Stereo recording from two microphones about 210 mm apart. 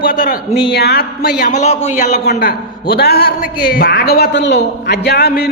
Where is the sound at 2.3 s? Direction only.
45° left (ahead or behind).